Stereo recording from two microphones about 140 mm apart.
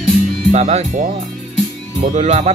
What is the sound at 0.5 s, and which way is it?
Speech, 55° right (ahead or behind).